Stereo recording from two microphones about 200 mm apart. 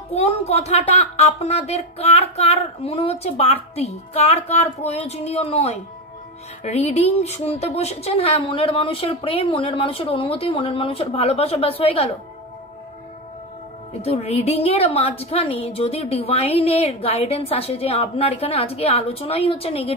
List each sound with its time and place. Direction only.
0.1 s a woman's voice: 30° left (ahead or behind)
14.0 s a woman's voice: 30° left (ahead or behind)